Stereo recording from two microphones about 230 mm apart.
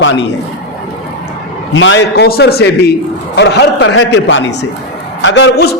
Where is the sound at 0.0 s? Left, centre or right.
Left.